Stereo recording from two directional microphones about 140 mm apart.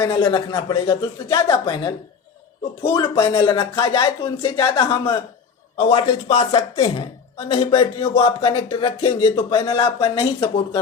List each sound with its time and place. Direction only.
0.0 s speech: 30° left (ahead or behind)
5.7 s speech: 45° left (ahead or behind)